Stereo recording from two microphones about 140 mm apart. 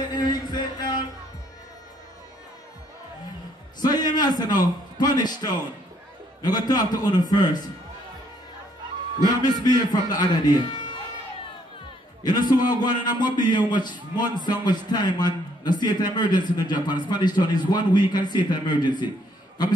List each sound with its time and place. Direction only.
0.1 s a sound: 30° left (ahead or behind)
3.8 s a man's voice: 30° left (ahead or behind)
9.4 s a man's voice: 30° left (ahead or behind)
12.2 s a man's voice: 30° left (ahead or behind)